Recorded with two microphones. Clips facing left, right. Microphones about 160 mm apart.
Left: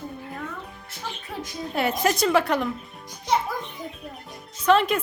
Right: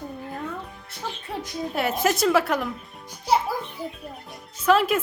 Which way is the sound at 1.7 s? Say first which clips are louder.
Even; centre (ahead or behind).